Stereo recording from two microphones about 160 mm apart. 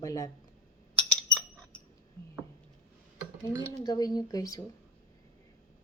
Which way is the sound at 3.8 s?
25° left (ahead or behind).